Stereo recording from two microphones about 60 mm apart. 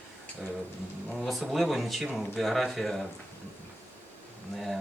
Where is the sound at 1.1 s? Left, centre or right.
Centre.